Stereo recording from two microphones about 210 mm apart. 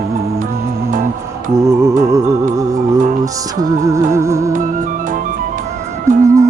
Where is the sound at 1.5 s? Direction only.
15° right (ahead or behind).